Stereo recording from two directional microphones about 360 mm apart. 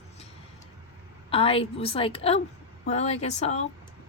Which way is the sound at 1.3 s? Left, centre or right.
Centre.